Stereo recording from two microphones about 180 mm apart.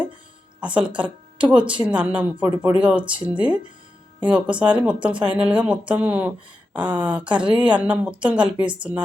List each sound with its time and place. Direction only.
0.6 s a woman's voice: 5° right (ahead or behind)